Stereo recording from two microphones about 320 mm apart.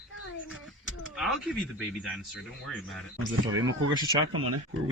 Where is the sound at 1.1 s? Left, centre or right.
Centre.